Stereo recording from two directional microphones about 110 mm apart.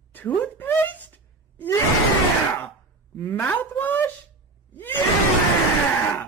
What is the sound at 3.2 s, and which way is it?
Speech, 15° left (ahead or behind).